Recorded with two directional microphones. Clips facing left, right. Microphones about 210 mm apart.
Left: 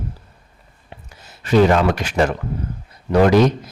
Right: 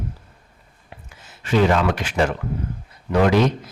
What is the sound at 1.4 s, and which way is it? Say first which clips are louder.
A man's voice: left 4 dB; 40° left (ahead or behind).